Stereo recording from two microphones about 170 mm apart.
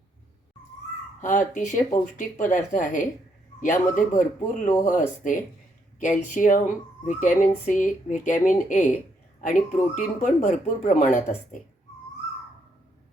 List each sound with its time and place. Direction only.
1.2 s speech: 50° left (ahead or behind)